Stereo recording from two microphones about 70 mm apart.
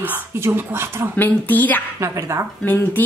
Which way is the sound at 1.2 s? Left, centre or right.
Left.